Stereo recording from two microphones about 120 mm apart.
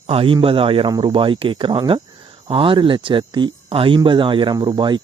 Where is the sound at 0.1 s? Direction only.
55° right (ahead or behind).